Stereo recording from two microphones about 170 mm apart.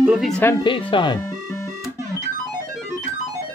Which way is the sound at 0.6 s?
30° left (ahead or behind).